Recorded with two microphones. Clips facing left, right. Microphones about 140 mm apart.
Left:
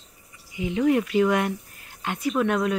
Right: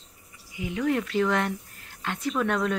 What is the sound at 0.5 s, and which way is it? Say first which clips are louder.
Speech: left 5 dB; 20° left (ahead or behind).